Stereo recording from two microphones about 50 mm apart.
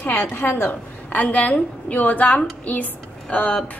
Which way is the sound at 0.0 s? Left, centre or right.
Left.